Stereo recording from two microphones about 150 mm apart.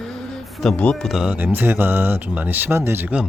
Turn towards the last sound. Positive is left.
turn(degrees=-10)  # may be behind; listen again after turning